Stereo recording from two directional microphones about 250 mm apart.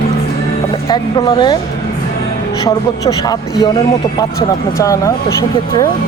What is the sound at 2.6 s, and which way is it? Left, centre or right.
Speech, centre.